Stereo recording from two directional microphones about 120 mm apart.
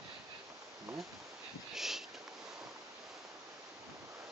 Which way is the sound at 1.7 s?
5° right (ahead or behind).